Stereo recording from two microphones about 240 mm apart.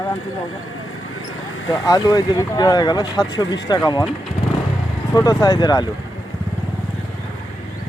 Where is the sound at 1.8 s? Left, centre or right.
Centre.